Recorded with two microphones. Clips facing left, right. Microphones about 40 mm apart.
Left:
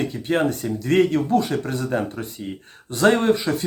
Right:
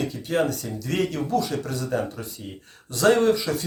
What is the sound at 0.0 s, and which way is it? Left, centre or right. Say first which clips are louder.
Speech: left 3 dB; left.